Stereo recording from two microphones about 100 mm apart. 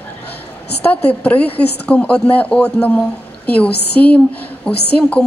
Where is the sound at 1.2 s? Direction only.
15° left (ahead or behind).